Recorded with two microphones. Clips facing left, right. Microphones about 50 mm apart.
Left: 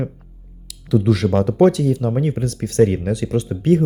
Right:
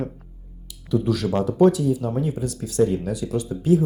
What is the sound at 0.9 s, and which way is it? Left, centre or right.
Speech, left.